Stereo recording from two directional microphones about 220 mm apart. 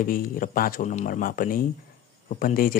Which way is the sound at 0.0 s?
40° left (ahead or behind).